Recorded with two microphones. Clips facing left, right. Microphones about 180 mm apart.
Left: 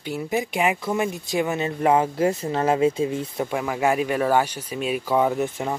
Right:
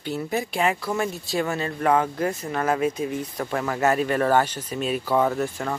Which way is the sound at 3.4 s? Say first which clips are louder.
Right 1 dB; 10° left (ahead or behind).